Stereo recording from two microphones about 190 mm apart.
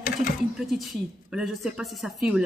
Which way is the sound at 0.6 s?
Centre (ahead or behind).